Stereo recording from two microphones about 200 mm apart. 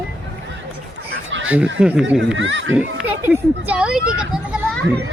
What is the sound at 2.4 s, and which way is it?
Speech, 70° right (ahead or behind).